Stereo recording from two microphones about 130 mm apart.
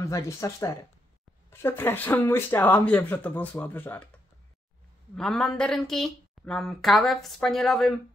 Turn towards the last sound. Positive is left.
turn(degrees=0)  # may be behind; listen again after turning